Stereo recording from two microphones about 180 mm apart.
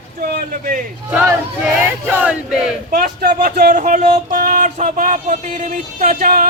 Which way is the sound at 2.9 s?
55° right (ahead or behind).